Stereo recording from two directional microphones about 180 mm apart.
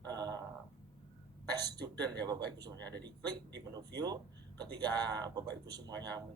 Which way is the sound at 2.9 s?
70° right (ahead or behind).